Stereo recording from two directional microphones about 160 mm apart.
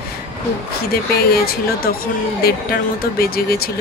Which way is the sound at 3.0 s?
75° left (ahead or behind).